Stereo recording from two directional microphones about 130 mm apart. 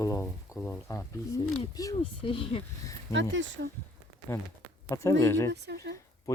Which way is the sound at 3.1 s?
25° left (ahead or behind).